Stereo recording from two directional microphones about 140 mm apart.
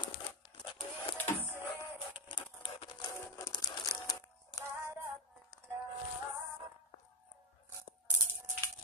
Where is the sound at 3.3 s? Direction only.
25° left (ahead or behind).